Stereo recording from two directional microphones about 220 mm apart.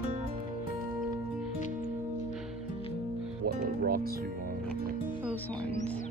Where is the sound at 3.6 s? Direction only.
40° right (ahead or behind).